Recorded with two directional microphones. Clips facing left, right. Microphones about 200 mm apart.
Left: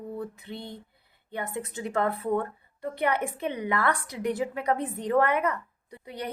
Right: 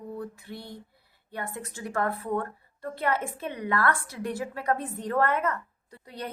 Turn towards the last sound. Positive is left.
turn(degrees=15)  # may be behind; listen again after turning